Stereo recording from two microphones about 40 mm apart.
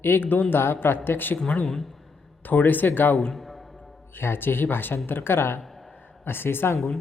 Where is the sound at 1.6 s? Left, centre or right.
Centre.